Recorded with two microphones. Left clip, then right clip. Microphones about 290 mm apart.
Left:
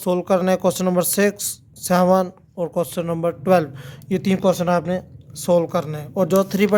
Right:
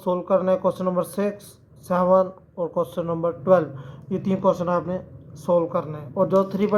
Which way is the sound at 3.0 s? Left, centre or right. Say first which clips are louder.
Left 2 dB; left.